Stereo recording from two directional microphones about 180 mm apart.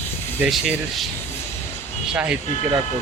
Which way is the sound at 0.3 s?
5° right (ahead or behind).